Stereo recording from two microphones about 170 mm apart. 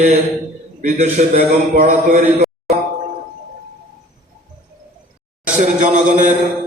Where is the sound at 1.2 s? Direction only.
45° right (ahead or behind).